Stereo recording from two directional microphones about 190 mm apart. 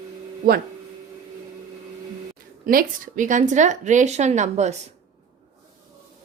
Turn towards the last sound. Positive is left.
turn(degrees=-35)  # may be behind; listen again after turning